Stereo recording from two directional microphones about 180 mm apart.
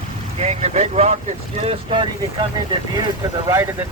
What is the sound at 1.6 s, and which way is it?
Speech, 30° right (ahead or behind).